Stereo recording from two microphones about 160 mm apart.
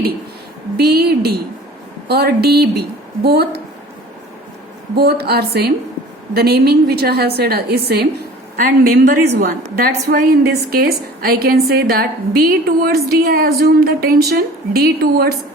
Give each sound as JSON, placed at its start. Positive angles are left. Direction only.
{"t": 0.8, "sound": "a woman's voice", "side_deg": -85}
{"t": 4.9, "sound": "a woman's voice", "side_deg": -85}
{"t": 8.5, "sound": "a woman's voice", "side_deg": -60}